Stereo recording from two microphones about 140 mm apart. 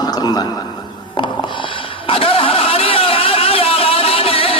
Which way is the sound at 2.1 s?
40° left (ahead or behind).